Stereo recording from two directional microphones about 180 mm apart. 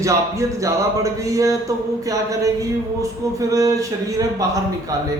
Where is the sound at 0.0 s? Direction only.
15° right (ahead or behind).